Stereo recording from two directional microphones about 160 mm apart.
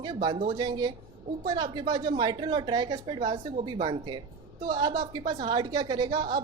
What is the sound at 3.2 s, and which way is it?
Speech, 40° right (ahead or behind).